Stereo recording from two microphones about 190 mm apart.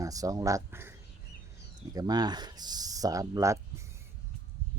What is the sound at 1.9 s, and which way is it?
Speech, 20° right (ahead or behind).